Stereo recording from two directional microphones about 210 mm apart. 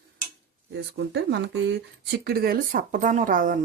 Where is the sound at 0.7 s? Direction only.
55° right (ahead or behind).